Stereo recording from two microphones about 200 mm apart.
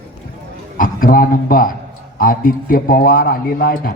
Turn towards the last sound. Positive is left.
turn(degrees=45)  # may be behind; listen again after turning